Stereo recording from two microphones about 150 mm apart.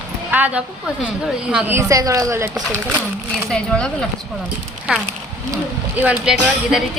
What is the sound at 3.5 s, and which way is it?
Speech, 5° left (ahead or behind).